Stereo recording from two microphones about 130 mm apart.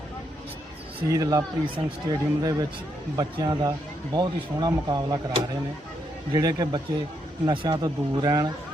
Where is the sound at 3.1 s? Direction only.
30° right (ahead or behind).